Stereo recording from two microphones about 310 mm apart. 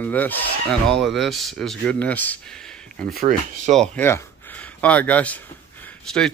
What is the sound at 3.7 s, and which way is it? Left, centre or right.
Speech, centre.